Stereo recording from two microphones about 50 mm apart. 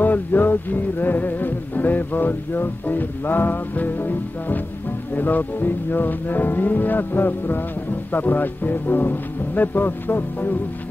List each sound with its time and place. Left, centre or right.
0.0 s music: left